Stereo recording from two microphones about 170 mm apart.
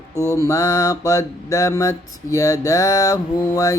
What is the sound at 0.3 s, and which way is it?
Mantra, 20° left (ahead or behind).